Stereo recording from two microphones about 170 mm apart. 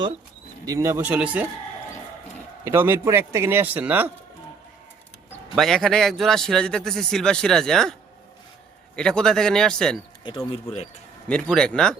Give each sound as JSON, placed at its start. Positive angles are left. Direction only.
{"t": 0.6, "sound": "speech", "side_deg": -15}
{"t": 2.6, "sound": "speech", "side_deg": -15}
{"t": 5.5, "sound": "a man's voice", "side_deg": 0}
{"t": 9.0, "sound": "a man's voice", "side_deg": 5}
{"t": 10.2, "sound": "speech", "side_deg": 35}
{"t": 11.3, "sound": "a man's voice", "side_deg": 5}